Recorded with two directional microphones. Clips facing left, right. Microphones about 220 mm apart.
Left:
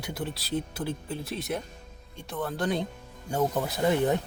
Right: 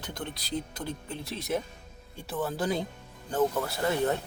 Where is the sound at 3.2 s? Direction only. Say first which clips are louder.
Even; 10° left (ahead or behind).